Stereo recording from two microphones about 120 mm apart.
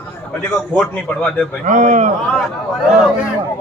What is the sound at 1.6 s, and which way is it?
Speech, 90° right.